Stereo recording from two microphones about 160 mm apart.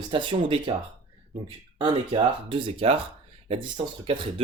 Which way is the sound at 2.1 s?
30° right (ahead or behind).